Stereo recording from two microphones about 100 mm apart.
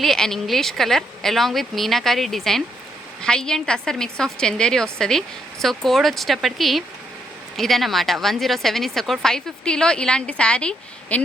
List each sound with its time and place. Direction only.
0.0 s a woman's voice: 5° left (ahead or behind)